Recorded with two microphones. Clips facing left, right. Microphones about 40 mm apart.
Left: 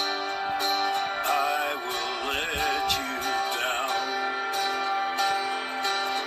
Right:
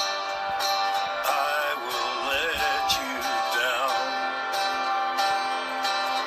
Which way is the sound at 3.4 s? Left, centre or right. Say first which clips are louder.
Right 3 dB; right.